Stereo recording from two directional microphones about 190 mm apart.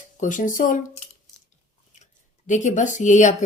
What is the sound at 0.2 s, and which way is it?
Speech, 40° left (ahead or behind).